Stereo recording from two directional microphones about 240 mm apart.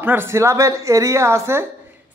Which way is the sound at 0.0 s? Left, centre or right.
Centre.